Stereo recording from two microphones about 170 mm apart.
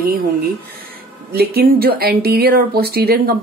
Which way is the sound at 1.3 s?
65° right (ahead or behind).